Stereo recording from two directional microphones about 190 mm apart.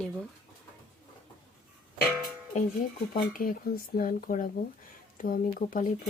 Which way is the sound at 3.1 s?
45° left (ahead or behind).